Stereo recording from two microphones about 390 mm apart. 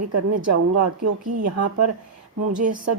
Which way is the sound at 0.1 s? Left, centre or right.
Right.